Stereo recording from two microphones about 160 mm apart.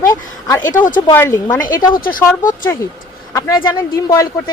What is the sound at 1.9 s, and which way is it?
Speech, 65° left (ahead or behind).